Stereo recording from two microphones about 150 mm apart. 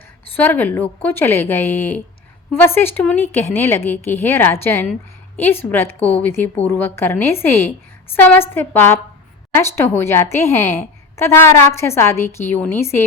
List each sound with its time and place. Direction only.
0.3 s a woman's voice: 15° left (ahead or behind)